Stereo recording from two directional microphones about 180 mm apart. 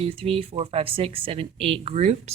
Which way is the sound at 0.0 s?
30° right (ahead or behind).